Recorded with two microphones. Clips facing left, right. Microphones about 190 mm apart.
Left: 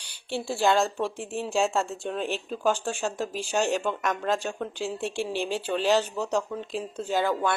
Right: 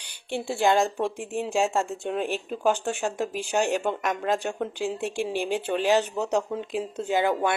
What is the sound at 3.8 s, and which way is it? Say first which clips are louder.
Speech: right 1 dB; 15° right (ahead or behind).